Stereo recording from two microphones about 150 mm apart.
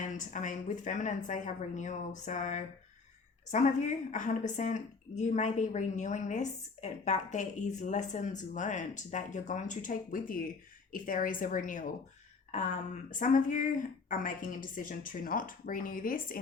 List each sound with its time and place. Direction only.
0.0 s a woman's voice: 60° left (ahead or behind)
13.1 s a woman's voice: 60° left (ahead or behind)